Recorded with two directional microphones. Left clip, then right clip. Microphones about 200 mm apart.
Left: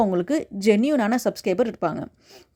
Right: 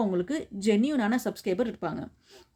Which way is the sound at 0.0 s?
35° left (ahead or behind).